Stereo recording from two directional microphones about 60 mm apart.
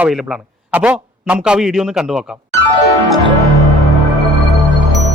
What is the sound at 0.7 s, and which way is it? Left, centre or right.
Speech, right.